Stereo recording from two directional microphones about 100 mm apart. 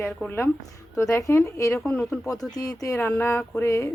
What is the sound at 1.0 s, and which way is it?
Speech, 30° left (ahead or behind).